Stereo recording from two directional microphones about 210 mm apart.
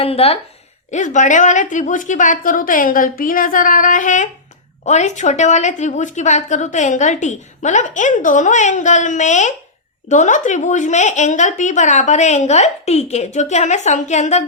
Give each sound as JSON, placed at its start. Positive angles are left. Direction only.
{"t": 0.0, "sound": "a woman's voice", "side_deg": 30}